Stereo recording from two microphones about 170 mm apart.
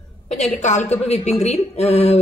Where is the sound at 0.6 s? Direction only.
45° left (ahead or behind).